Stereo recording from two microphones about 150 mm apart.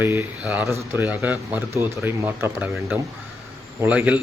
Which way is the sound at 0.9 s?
15° right (ahead or behind).